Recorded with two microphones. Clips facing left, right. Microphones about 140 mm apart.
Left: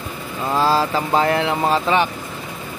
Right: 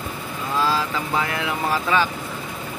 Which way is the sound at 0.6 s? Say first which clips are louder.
Left 5 dB; 35° left (ahead or behind).